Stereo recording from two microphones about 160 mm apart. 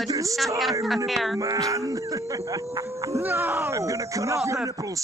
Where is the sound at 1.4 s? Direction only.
20° right (ahead or behind).